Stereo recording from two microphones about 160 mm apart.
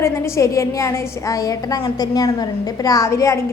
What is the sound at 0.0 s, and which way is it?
A woman's voice, 20° left (ahead or behind).